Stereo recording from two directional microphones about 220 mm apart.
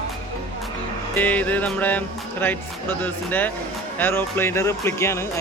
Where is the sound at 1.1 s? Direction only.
5° left (ahead or behind).